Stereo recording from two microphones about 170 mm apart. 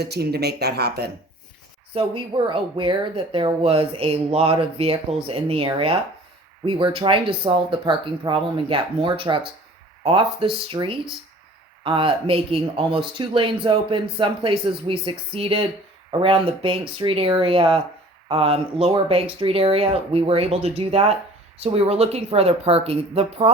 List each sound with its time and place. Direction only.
0.0 s speech: 70° right (ahead or behind)
1.9 s speech: 30° right (ahead or behind)